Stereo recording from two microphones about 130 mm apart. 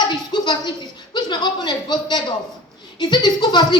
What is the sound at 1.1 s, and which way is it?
Speech, 35° left (ahead or behind).